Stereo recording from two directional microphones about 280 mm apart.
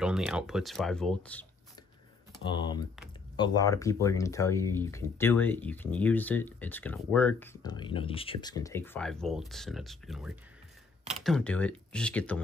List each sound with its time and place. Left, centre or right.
0.0 s speech: centre
2.4 s speech: centre